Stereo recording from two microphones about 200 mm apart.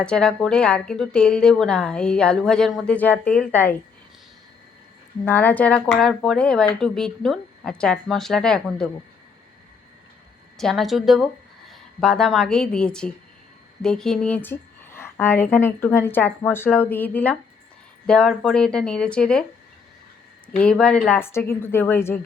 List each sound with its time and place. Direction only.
0.0 s a woman's voice: 5° left (ahead or behind)
5.2 s a woman's voice: 10° left (ahead or behind)
10.6 s a woman's voice: centre (ahead or behind)
20.6 s a woman's voice: 5° left (ahead or behind)